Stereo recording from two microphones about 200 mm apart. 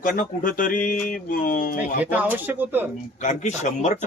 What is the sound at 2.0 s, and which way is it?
Speech, 10° right (ahead or behind).